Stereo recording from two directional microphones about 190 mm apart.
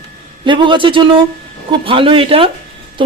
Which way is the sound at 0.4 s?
25° right (ahead or behind).